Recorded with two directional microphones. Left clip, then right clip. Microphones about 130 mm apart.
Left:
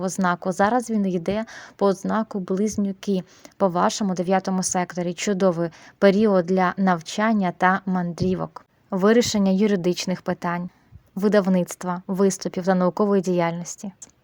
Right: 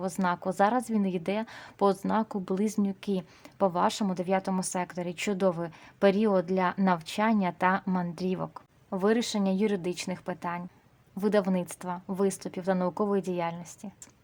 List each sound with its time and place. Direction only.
0.0 s a woman's voice: 35° left (ahead or behind)
3.1 s a woman's voice: 35° left (ahead or behind)
9.0 s speech: 45° left (ahead or behind)